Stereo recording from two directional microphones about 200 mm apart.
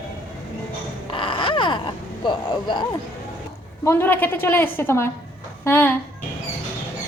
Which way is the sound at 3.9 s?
10° left (ahead or behind).